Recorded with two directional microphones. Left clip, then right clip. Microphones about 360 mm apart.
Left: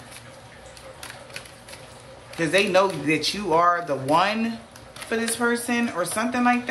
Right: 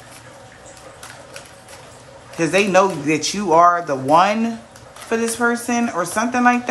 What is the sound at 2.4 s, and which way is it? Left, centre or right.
A woman's voice, centre.